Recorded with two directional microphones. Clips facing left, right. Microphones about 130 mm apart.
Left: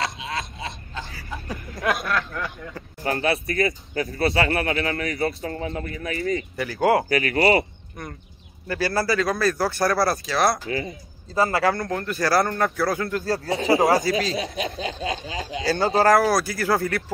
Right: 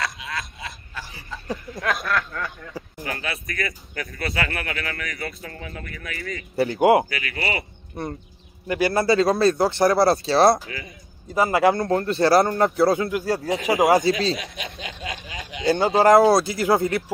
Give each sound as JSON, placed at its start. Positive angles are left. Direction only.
{"t": 0.0, "sound": "a sound", "side_deg": 25}
{"t": 1.8, "sound": "a sound", "side_deg": 0}
{"t": 2.1, "sound": "speech", "side_deg": 20}
{"t": 3.0, "sound": "speech", "side_deg": 35}
{"t": 6.5, "sound": "speech", "side_deg": -30}
{"t": 6.8, "sound": "speech", "side_deg": -20}
{"t": 7.1, "sound": "speech", "side_deg": 40}
{"t": 8.0, "sound": "speech", "side_deg": -30}
{"t": 8.6, "sound": "speech", "side_deg": -20}
{"t": 10.7, "sound": "speech", "side_deg": 30}
{"t": 11.2, "sound": "speech", "side_deg": -15}
{"t": 13.1, "sound": "speech", "side_deg": -10}
{"t": 14.3, "sound": "speech", "side_deg": 35}
{"t": 15.6, "sound": "speech", "side_deg": -20}